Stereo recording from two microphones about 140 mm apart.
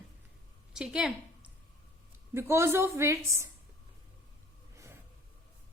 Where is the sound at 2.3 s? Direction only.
20° right (ahead or behind).